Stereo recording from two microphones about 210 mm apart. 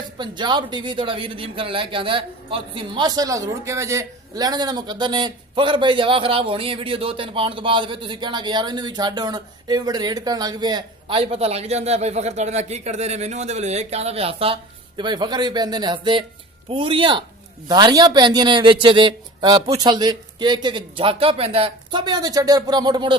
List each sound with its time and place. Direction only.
0.2 s speech: 20° right (ahead or behind)